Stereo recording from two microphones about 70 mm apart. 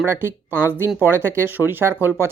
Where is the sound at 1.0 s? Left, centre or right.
Right.